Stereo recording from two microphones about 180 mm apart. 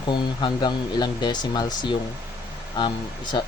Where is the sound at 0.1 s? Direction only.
25° left (ahead or behind).